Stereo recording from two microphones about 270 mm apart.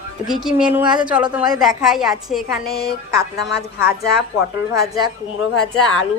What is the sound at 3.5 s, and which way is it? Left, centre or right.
Speech, left.